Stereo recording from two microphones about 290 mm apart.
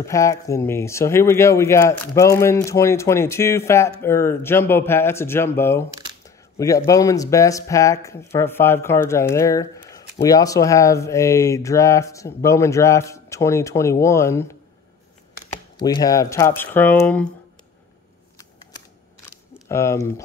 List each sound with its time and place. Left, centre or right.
0.0 s speech: centre
6.2 s camera: centre
6.9 s speech: centre
15.8 s speech: centre
19.5 s speech: centre